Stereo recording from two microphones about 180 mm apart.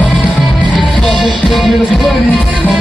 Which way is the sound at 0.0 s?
10° left (ahead or behind).